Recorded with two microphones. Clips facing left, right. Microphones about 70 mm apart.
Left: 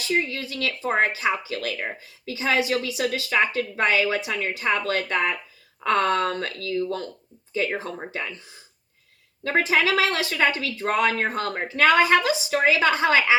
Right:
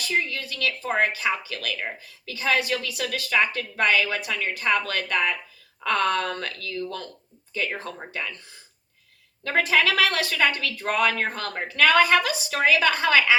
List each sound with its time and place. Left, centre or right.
0.0 s speech: left